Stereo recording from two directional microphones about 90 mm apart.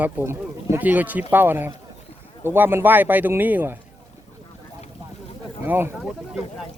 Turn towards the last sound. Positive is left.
turn(degrees=0)  # may be behind; listen again after turning